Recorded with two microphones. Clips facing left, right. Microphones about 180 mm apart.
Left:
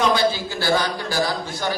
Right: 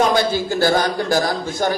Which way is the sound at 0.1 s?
50° right (ahead or behind).